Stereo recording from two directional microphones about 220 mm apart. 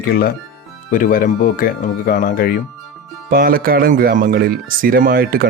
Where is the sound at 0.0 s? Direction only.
40° left (ahead or behind).